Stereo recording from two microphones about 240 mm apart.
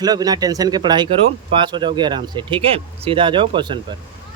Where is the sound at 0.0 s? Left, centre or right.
Centre.